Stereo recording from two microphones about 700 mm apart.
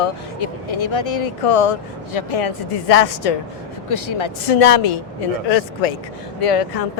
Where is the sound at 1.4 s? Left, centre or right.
Left.